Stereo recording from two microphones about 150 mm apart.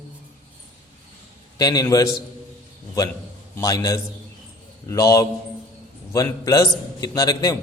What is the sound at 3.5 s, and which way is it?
A man's voice, 20° left (ahead or behind).